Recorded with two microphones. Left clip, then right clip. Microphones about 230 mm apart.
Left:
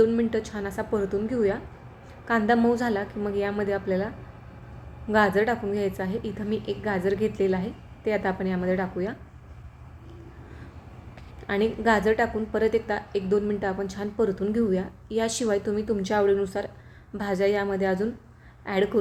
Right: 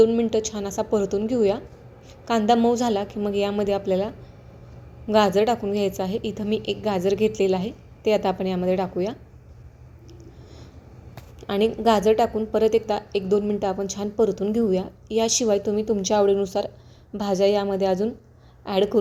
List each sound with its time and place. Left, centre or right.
0.3 s a woman's voice: centre
0.8 s a woman's voice: centre
1.0 s a woman's voice: centre
2.2 s a woman's voice: centre
11.3 s a woman's voice: centre